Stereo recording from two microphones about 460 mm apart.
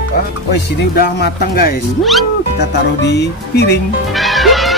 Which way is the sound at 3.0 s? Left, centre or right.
Left.